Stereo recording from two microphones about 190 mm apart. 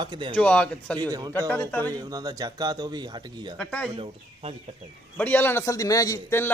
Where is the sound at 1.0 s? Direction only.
20° right (ahead or behind).